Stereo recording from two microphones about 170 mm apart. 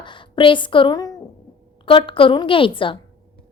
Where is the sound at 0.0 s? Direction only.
30° left (ahead or behind).